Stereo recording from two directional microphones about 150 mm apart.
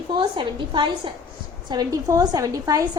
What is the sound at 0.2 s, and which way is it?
A woman's voice, 35° right (ahead or behind).